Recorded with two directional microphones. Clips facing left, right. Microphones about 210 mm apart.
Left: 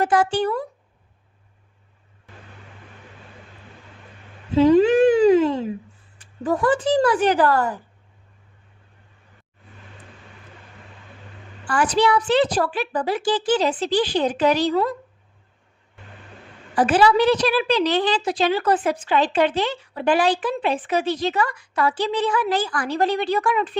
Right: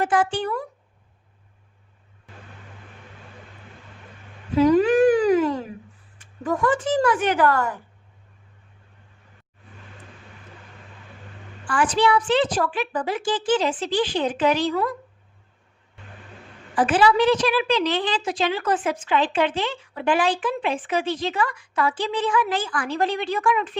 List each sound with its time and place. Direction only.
0.0 s a woman's voice: 40° left (ahead or behind)
4.5 s a sound: 25° left (ahead or behind)
6.1 s a woman's voice: 35° left (ahead or behind)
11.6 s a woman's voice: 40° left (ahead or behind)
16.7 s a woman's voice: 40° left (ahead or behind)